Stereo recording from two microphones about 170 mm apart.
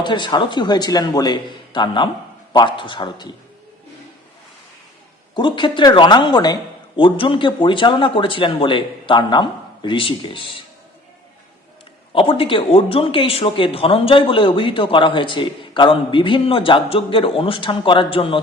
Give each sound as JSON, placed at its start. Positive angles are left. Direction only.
{"t": 0.0, "sound": "speech", "side_deg": 25}
{"t": 5.3, "sound": "speech", "side_deg": 30}
{"t": 12.1, "sound": "speech", "side_deg": 30}